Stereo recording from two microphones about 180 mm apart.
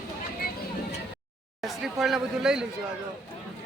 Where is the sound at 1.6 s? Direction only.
Centre (ahead or behind).